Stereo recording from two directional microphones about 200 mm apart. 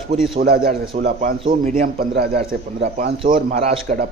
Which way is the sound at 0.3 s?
50° right (ahead or behind).